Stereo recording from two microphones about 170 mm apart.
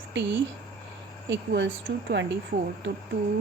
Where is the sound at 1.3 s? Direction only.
90° right.